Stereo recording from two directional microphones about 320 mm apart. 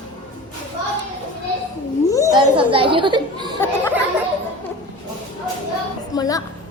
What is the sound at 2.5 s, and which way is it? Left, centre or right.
A child's voice, centre.